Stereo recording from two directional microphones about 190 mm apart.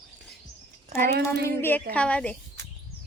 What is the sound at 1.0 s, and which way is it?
Speech, 60° right (ahead or behind).